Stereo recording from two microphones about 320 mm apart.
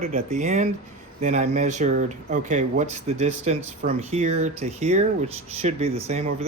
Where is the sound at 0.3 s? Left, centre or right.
Right.